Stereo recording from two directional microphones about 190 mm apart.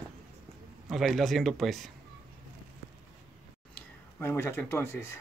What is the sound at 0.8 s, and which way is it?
A man's voice, centre (ahead or behind).